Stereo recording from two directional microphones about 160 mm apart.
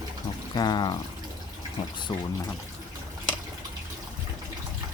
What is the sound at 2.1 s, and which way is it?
Speech, 30° left (ahead or behind).